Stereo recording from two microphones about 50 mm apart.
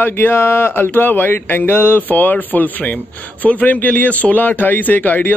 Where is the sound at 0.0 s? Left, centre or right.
Left.